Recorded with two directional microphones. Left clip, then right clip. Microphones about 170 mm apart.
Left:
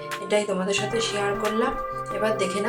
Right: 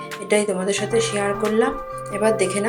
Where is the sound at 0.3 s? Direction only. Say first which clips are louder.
Right 4 dB; 20° right (ahead or behind).